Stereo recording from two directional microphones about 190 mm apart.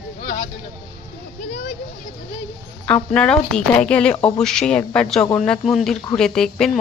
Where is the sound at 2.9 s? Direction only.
5° left (ahead or behind).